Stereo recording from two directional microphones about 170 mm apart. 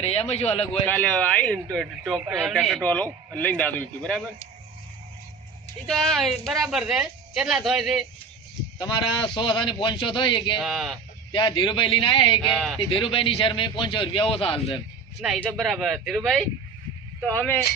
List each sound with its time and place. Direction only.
0.0 s a man's voice: 35° left (ahead or behind)
0.9 s speech: 10° left (ahead or behind)
5.9 s speech: centre (ahead or behind)
8.8 s a man's voice: 30° left (ahead or behind)
10.6 s speech: centre (ahead or behind)
11.3 s a man's voice: 30° left (ahead or behind)
15.4 s speech: centre (ahead or behind)